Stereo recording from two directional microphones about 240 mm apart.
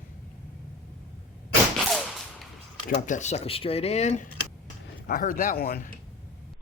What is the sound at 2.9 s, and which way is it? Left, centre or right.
Speech, left.